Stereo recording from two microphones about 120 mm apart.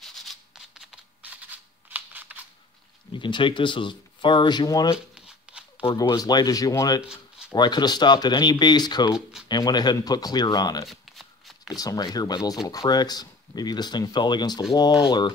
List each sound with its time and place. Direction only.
0.0 s a sound: centre (ahead or behind)
3.1 s speech: 40° left (ahead or behind)
5.9 s speech: 35° left (ahead or behind)
7.0 s a sound: 5° right (ahead or behind)
7.5 s speech: 40° left (ahead or behind)
10.9 s shuffling cards: centre (ahead or behind)
11.7 s speech: 30° left (ahead or behind)